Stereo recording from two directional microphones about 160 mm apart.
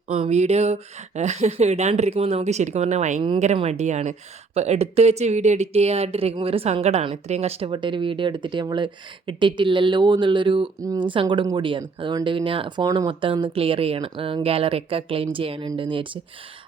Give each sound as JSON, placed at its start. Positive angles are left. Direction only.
{"t": 0.1, "sound": "speech", "side_deg": -45}
{"t": 10.8, "sound": "speech", "side_deg": -20}
{"t": 11.1, "sound": "speech", "side_deg": -30}